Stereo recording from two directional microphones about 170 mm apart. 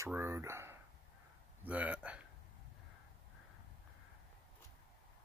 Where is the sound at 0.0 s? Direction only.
15° right (ahead or behind).